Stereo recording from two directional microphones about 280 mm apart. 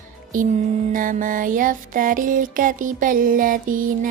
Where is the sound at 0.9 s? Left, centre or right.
Right.